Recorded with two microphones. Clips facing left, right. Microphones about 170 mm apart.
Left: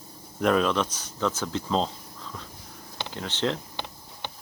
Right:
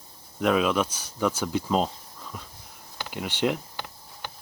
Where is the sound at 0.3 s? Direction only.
5° right (ahead or behind).